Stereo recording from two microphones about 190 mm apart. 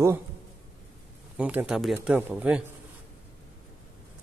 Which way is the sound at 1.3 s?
5° right (ahead or behind).